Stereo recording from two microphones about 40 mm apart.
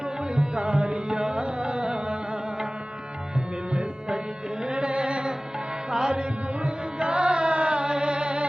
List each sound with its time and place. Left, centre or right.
0.3 s music: centre
3.7 s music: centre